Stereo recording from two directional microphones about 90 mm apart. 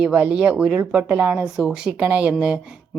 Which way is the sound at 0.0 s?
10° right (ahead or behind).